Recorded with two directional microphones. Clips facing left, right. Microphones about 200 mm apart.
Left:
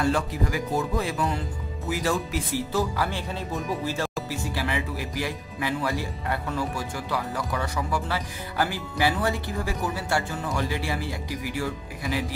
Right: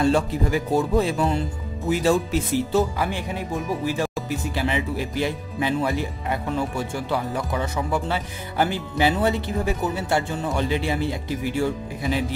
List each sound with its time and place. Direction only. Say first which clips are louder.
0.0 s speech: right 5 dB; 25° right (ahead or behind)